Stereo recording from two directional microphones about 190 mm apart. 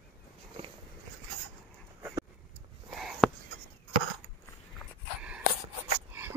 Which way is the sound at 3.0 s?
Centre (ahead or behind).